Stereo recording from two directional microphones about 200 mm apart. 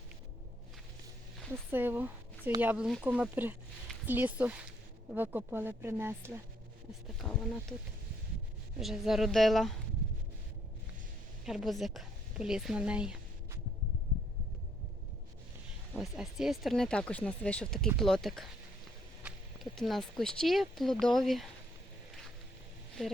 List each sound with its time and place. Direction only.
1.7 s speech: 10° right (ahead or behind)
7.2 s speech: 5° left (ahead or behind)
8.8 s speech: centre (ahead or behind)
11.4 s a woman's voice: centre (ahead or behind)
16.0 s speech: centre (ahead or behind)